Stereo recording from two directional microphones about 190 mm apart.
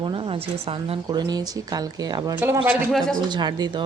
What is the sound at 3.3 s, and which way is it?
Speech, 25° right (ahead or behind).